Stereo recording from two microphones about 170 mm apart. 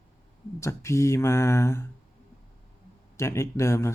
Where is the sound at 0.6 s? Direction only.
15° left (ahead or behind).